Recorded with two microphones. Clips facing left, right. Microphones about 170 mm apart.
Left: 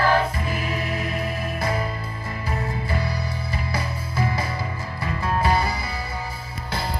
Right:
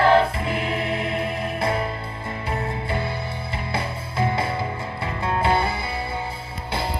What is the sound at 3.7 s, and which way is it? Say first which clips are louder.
Music: right 1 dB; 25° right (ahead or behind).